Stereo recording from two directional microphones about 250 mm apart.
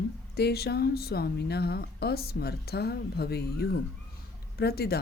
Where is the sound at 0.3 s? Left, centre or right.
Left.